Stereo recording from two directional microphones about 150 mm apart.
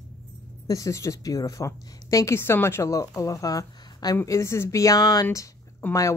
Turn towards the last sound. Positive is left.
turn(degrees=20)  # may be behind; listen again after turning